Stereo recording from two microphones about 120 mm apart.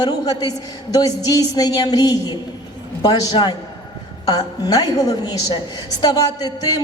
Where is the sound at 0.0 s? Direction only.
35° left (ahead or behind).